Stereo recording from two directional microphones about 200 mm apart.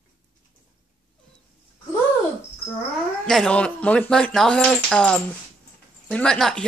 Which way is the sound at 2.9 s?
5° left (ahead or behind).